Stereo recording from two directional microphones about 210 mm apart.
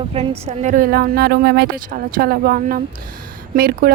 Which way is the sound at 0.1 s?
30° right (ahead or behind).